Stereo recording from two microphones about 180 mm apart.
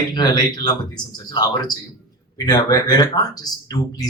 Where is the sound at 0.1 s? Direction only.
25° left (ahead or behind).